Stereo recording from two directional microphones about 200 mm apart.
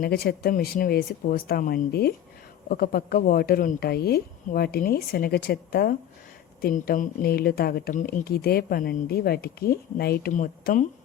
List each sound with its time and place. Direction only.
0.0 s speech: 50° left (ahead or behind)